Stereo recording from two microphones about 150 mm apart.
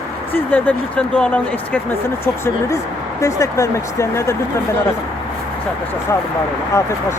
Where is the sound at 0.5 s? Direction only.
10° left (ahead or behind).